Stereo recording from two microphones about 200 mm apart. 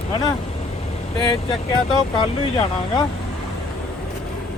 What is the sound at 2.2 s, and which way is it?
Speech, 20° left (ahead or behind).